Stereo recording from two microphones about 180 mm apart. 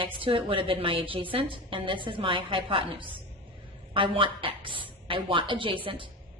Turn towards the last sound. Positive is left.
turn(degrees=-30)  # may be behind; listen again after turning